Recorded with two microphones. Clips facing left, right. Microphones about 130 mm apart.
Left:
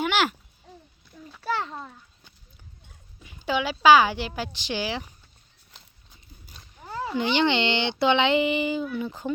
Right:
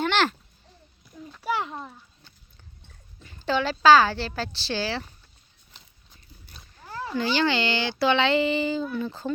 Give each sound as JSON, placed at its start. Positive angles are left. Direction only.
{"t": 0.0, "sound": "babbling", "side_deg": 10}
{"t": 1.6, "sound": "a child's voice", "side_deg": -5}
{"t": 2.8, "sound": "speech", "side_deg": 10}
{"t": 6.7, "sound": "a sound", "side_deg": 15}
{"t": 7.2, "sound": "speech", "side_deg": 20}